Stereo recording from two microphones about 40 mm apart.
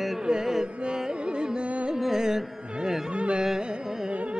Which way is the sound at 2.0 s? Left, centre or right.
Centre.